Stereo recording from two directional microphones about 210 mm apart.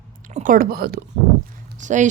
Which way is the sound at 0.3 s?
40° right (ahead or behind).